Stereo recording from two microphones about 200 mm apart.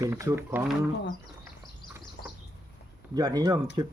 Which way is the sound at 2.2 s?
65° left (ahead or behind).